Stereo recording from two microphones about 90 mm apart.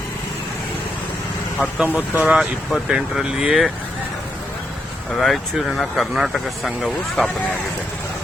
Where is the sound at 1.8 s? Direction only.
20° right (ahead or behind).